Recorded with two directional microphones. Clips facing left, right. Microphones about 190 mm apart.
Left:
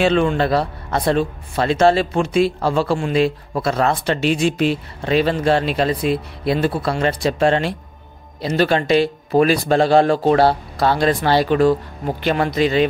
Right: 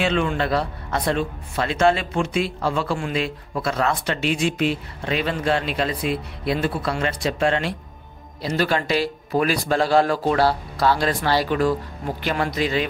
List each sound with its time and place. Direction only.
0.0 s a man's voice: 35° left (ahead or behind)